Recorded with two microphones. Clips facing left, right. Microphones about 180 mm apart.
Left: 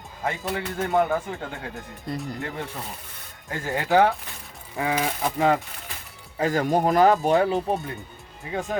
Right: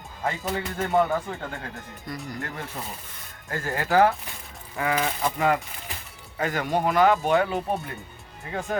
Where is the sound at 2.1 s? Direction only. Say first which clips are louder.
Left 5 dB; 30° left (ahead or behind).